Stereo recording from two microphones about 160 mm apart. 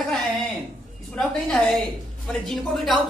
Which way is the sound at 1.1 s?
5° left (ahead or behind).